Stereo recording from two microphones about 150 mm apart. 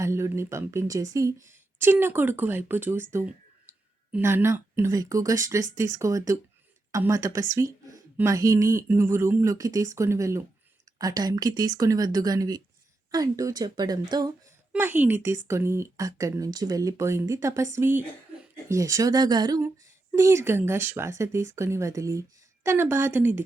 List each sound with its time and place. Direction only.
0.0 s speech: 20° right (ahead or behind)
14.7 s speech: 15° right (ahead or behind)